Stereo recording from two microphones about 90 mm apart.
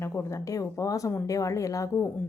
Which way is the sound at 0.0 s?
30° left (ahead or behind).